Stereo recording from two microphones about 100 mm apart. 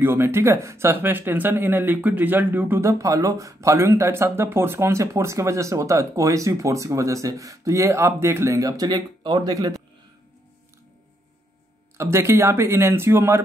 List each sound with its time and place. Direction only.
0.0 s speech: 20° right (ahead or behind)
2.8 s speech: 30° right (ahead or behind)
12.0 s speech: 25° right (ahead or behind)